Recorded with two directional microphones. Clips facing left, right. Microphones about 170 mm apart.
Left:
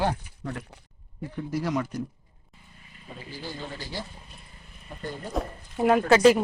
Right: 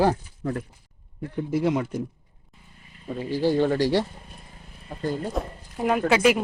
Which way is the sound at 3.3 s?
80° right.